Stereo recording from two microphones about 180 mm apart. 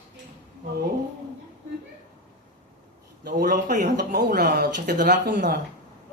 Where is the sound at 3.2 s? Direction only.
55° right (ahead or behind).